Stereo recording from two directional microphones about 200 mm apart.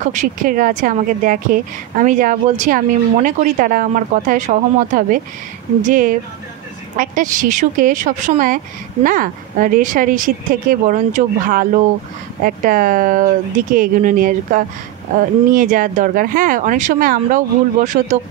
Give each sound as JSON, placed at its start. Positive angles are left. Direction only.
{"t": 0.0, "sound": "a woman's voice", "side_deg": -40}